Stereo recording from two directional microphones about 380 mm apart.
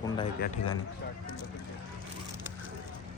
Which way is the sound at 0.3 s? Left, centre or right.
Left.